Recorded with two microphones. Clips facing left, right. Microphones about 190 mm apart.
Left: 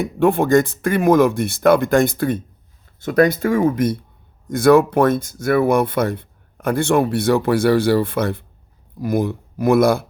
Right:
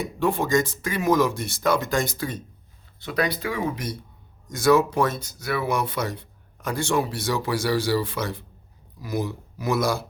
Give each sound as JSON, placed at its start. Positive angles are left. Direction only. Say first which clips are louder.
{"t": 0.0, "sound": "speech", "louder": "left 8 dB", "side_deg": 55}
{"t": 3.0, "sound": "speech", "louder": "left 10 dB", "side_deg": 45}